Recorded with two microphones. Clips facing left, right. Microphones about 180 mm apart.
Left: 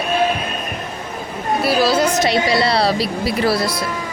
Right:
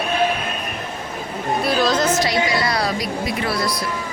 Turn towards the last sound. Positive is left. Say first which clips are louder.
# left 4 dB
turn(degrees=30)  # may be behind; listen again after turning